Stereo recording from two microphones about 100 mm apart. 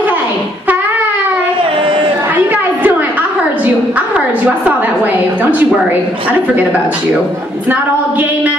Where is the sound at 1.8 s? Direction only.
60° right (ahead or behind).